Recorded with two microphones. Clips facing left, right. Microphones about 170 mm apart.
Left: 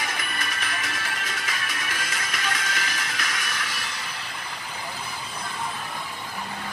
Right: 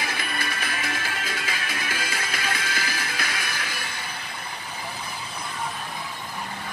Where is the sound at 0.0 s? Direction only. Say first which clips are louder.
Right 2 dB; 30° right (ahead or behind).